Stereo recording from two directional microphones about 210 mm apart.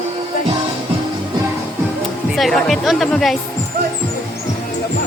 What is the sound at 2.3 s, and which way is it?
Speech, centre (ahead or behind).